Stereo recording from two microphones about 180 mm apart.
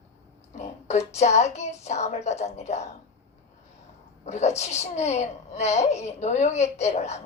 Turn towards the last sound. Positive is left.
turn(degrees=40)  # may be behind; listen again after turning